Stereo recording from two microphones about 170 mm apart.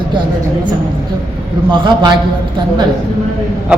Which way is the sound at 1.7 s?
25° right (ahead or behind).